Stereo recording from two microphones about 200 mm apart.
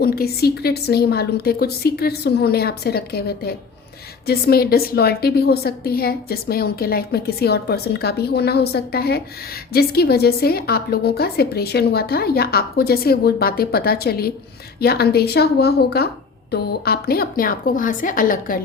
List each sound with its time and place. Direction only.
0.0 s a woman's voice: 50° left (ahead or behind)